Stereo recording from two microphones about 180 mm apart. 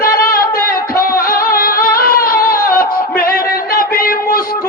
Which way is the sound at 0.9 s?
55° left (ahead or behind).